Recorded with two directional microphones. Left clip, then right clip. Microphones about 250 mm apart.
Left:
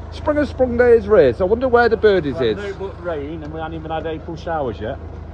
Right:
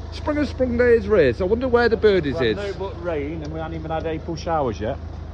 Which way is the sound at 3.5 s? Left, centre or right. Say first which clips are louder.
Left 3 dB; right.